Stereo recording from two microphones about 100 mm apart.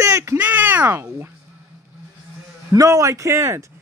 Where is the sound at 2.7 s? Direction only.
30° right (ahead or behind).